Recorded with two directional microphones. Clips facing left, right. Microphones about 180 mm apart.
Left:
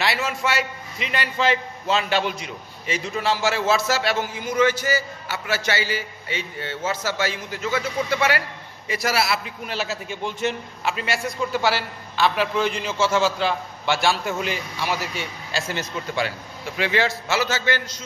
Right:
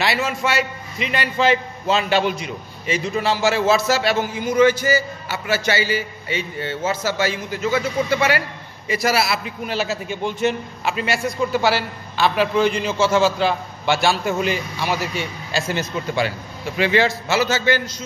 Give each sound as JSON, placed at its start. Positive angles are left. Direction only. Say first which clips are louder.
{"t": 0.0, "sound": "a man's voice", "louder": "right 3 dB", "side_deg": -5}
{"t": 12.9, "sound": "a man's voice", "louder": "right 1 dB", "side_deg": -35}
{"t": 13.2, "sound": "a man's voice", "louder": "right 4 dB", "side_deg": -5}